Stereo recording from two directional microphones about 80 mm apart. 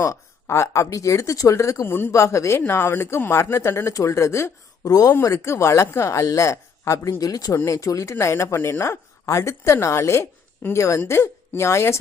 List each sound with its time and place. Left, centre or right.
0.0 s speech: left
4.9 s speech: left
5.2 s a woman's voice: left